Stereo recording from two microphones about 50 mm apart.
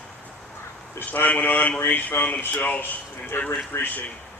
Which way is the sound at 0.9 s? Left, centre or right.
Left.